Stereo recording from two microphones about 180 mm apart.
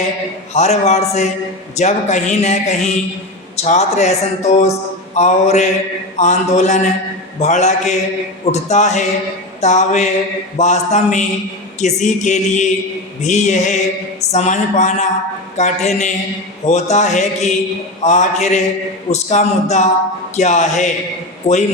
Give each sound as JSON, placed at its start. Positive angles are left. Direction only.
{"t": 0.5, "sound": "speech", "side_deg": 40}